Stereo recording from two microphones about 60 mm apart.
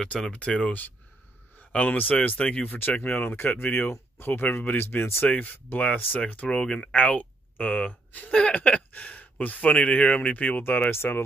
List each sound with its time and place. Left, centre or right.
0.0 s speech: centre; by 5.3 s left
5.3 s speech: left
10.3 s speech: left